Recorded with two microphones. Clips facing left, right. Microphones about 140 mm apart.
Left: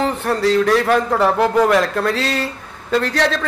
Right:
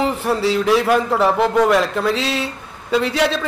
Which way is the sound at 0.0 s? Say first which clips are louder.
Even; 5° right (ahead or behind).